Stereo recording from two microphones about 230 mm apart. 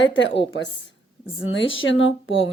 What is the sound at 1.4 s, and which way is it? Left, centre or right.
Speech, left.